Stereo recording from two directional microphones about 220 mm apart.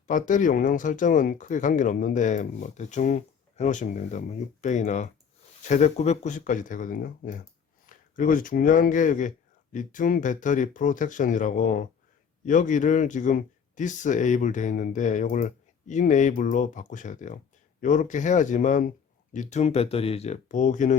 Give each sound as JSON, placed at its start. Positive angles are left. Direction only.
{"t": 0.1, "sound": "speech", "side_deg": 35}